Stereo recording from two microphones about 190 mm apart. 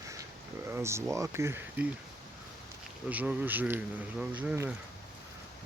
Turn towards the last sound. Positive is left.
turn(degrees=-10)  # may be behind; listen again after turning